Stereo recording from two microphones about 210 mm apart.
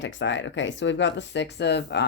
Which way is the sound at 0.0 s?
60° left (ahead or behind).